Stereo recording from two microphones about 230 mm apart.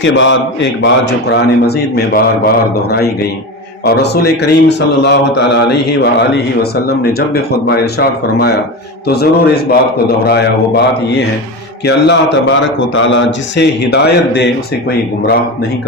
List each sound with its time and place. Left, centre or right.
0.0 s a man's voice: left
3.8 s a man's voice: left
11.9 s a man's voice: left